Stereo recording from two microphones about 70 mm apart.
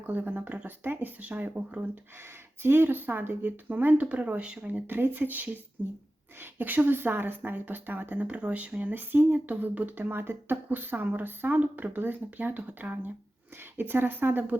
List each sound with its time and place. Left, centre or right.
0.0 s speech: right
2.6 s speech: right